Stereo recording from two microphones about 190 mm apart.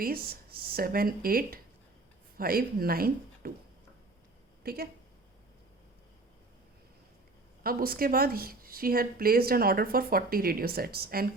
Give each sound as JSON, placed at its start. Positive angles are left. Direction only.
{"t": 0.0, "sound": "speech", "side_deg": -50}
{"t": 4.6, "sound": "a woman's voice", "side_deg": -55}
{"t": 7.6, "sound": "speech", "side_deg": -50}